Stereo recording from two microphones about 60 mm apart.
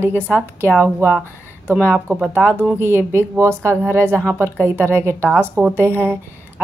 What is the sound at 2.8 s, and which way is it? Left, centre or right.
Speech, right.